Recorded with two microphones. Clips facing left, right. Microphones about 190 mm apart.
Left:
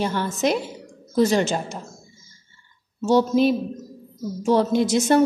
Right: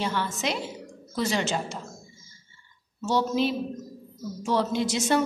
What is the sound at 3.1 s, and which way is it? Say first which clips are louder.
A woman's voice: left 7 dB; 45° left (ahead or behind).